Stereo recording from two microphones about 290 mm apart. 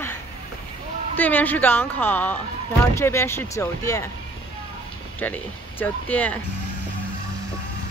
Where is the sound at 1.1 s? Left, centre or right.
Centre.